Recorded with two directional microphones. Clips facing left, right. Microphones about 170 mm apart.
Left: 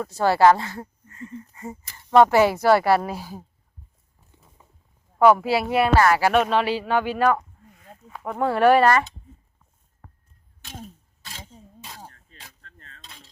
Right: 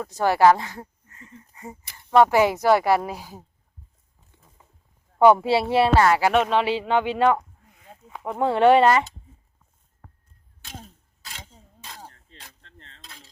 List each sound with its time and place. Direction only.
0.0 s speech: 15° right (ahead or behind)
5.2 s speech: 25° right (ahead or behind)
10.6 s a sound: centre (ahead or behind)
12.6 s cutlery: 25° right (ahead or behind)